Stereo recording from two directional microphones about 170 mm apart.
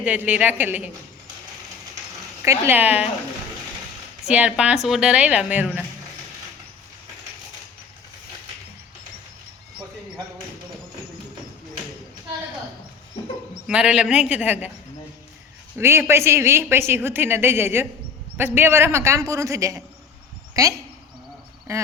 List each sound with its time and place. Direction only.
0.0 s a woman's voice: 10° right (ahead or behind)
2.4 s a woman's voice: 15° right (ahead or behind)
4.3 s a woman's voice: 5° right (ahead or behind)
13.7 s a man's voice: 5° right (ahead or behind)
15.8 s a woman's voice: 15° right (ahead or behind)